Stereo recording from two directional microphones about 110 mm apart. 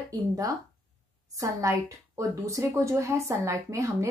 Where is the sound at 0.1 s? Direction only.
30° right (ahead or behind).